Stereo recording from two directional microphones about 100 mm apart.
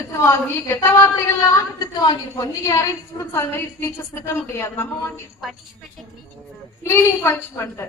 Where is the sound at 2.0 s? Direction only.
40° left (ahead or behind).